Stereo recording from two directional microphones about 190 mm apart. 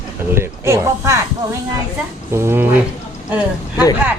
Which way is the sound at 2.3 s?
10° right (ahead or behind).